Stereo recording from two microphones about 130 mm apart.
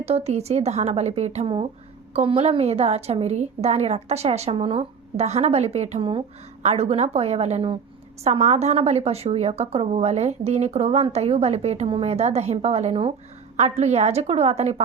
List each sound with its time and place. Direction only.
0.0 s a woman's voice: 55° right (ahead or behind)